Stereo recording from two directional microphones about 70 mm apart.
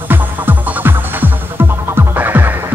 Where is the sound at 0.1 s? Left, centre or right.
Right.